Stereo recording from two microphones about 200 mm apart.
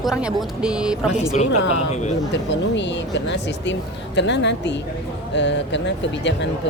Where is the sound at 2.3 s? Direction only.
60° left (ahead or behind).